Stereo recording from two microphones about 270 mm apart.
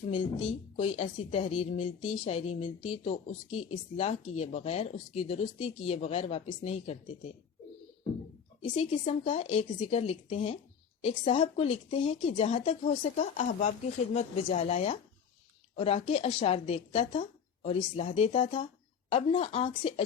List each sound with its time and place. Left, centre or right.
0.1 s speech: left
8.6 s speech: left